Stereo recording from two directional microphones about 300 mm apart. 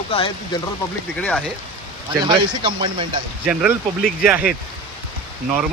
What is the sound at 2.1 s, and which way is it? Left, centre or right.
Speech, centre.